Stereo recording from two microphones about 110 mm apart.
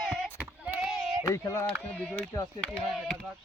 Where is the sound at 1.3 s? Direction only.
30° left (ahead or behind).